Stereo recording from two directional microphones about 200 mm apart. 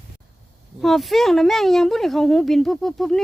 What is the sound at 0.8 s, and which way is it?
Speech, centre (ahead or behind).